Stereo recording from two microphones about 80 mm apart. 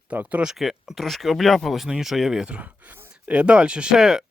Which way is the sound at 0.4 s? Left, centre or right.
Centre.